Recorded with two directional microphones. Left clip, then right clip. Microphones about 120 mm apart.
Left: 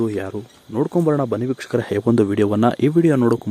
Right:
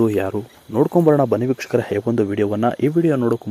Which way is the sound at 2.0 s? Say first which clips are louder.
Left 2 dB; 65° left (ahead or behind).